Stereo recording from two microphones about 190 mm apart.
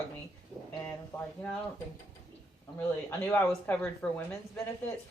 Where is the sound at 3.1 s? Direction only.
10° left (ahead or behind).